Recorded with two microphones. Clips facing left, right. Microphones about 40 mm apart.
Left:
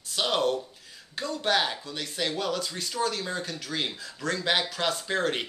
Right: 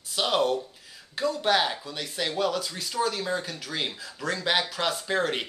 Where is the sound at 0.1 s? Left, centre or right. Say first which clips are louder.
Right 1 dB; centre.